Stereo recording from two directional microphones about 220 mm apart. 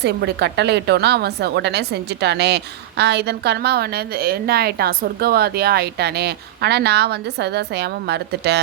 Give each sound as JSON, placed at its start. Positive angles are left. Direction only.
{"t": 0.0, "sound": "a woman's voice", "side_deg": -50}